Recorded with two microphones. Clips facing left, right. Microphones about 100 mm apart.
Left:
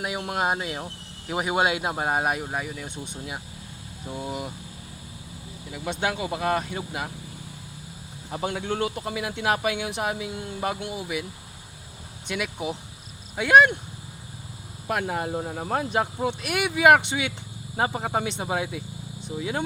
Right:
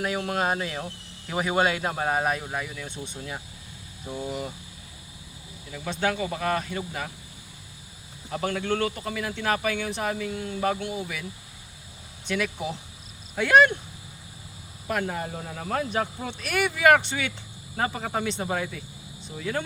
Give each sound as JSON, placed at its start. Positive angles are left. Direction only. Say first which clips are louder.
{"t": 0.0, "sound": "speech", "louder": "even", "side_deg": 10}
{"t": 5.7, "sound": "speech", "louder": "right 1 dB", "side_deg": 15}
{"t": 8.3, "sound": "speech", "louder": "right 1 dB", "side_deg": 15}
{"t": 12.3, "sound": "speech", "louder": "right 1 dB", "side_deg": 10}
{"t": 14.8, "sound": "speech", "louder": "left 2 dB", "side_deg": 20}